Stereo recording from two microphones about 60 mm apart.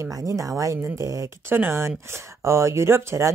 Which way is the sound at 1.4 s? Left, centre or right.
Right.